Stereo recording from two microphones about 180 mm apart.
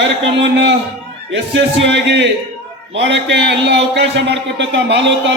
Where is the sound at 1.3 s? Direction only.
75° right (ahead or behind).